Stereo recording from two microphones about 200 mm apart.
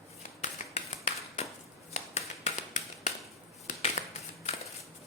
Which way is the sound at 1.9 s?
35° left (ahead or behind).